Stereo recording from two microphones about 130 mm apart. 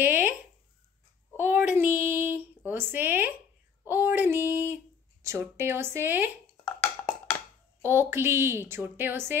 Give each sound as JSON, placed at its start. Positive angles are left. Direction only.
{"t": 0.0, "sound": "a sound", "side_deg": -15}
{"t": 1.3, "sound": "a woman's voice", "side_deg": -15}
{"t": 7.8, "sound": "a woman's voice", "side_deg": -15}